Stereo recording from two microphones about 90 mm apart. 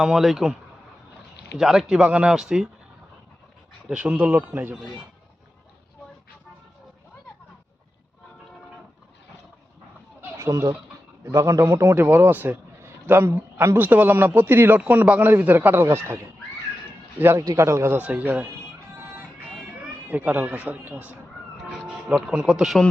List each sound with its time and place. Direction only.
0.0 s speech: 5° right (ahead or behind)
1.5 s speech: 5° right (ahead or behind)
3.8 s speech: 15° right (ahead or behind)
4.7 s speech: 5° right (ahead or behind)
10.2 s a sound: 25° right (ahead or behind)
10.5 s a man's voice: 40° right (ahead or behind)
17.9 s speech: 15° right (ahead or behind)
18.9 s music: 25° right (ahead or behind)
20.1 s a man's voice: 20° right (ahead or behind)